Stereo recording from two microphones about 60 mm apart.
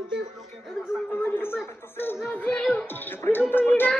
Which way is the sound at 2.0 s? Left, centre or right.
Left.